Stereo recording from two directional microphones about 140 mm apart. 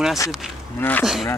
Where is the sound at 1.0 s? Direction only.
5° right (ahead or behind).